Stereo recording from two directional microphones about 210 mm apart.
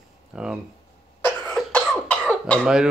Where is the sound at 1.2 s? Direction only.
5° left (ahead or behind).